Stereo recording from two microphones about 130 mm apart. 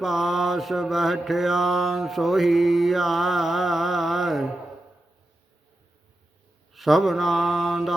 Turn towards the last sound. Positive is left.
turn(degrees=0)  # may be behind; listen again after turning